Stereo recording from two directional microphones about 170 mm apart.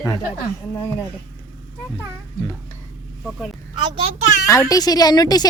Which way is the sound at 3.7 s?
25° right (ahead or behind).